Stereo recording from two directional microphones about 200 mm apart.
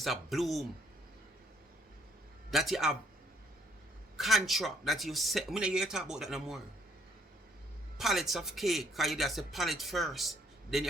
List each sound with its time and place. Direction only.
0.0 s speech: centre (ahead or behind)
2.5 s speech: centre (ahead or behind)
4.2 s speech: centre (ahead or behind)
7.9 s speech: centre (ahead or behind)